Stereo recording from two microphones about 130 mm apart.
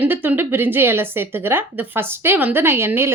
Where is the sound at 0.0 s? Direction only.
15° right (ahead or behind).